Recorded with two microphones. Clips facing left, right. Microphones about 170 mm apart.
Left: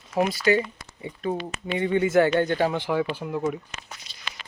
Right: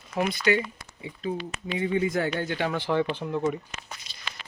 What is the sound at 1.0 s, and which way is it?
Speech, 50° left (ahead or behind).